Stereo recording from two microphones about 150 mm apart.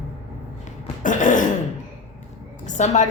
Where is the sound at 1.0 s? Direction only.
60° left (ahead or behind).